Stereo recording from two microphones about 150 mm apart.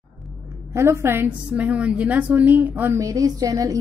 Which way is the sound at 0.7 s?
15° right (ahead or behind).